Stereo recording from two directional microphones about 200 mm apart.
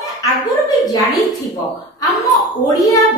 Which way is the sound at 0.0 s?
15° left (ahead or behind).